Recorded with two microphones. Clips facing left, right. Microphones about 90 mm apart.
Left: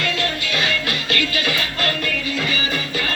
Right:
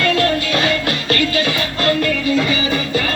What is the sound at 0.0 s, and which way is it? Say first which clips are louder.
Music: right 8 dB; 45° right (ahead or behind).